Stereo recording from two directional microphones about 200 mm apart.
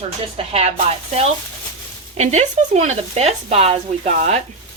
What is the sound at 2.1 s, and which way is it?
A woman's voice, 35° right (ahead or behind).